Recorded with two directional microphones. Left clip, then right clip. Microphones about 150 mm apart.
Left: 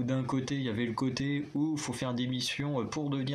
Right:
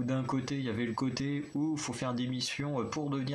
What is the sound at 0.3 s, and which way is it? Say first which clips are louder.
Speech: left 1 dB; 20° left (ahead or behind).